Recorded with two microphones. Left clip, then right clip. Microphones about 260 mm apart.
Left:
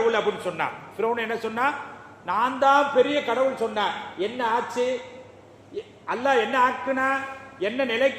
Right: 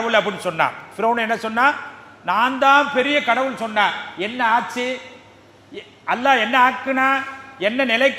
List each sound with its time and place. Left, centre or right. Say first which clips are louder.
0.1 s a man's voice: right 6 dB; right